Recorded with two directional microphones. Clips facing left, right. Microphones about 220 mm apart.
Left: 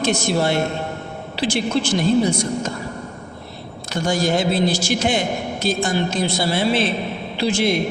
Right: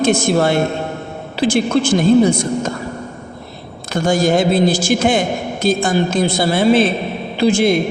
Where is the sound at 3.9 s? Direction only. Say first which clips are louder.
Right 5 dB; 50° right (ahead or behind).